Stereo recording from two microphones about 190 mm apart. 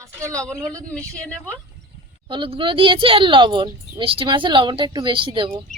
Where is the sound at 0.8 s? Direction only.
5° left (ahead or behind).